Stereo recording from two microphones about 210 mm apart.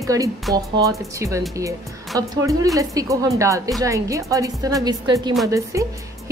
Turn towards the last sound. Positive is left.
turn(degrees=-15)  # may be behind; listen again after turning